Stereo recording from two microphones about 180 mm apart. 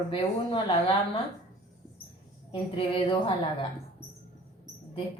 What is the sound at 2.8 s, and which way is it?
Speech, 30° left (ahead or behind).